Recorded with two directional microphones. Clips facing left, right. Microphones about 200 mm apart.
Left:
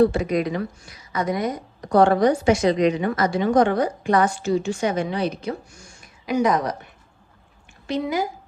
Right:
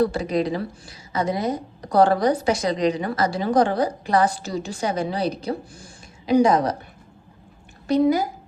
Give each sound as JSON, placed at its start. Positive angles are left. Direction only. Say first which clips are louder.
{"t": 0.0, "sound": "a woman's voice", "louder": "left 2 dB", "side_deg": -35}
{"t": 7.9, "sound": "a woman's voice", "louder": "right 5 dB", "side_deg": -40}